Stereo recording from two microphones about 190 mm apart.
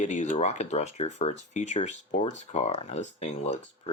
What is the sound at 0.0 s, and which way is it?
Speech, 40° left (ahead or behind).